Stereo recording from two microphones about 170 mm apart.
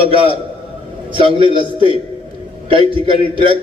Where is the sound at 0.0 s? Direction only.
30° right (ahead or behind).